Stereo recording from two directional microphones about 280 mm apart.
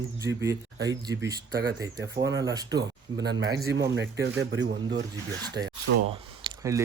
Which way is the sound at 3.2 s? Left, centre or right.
Right.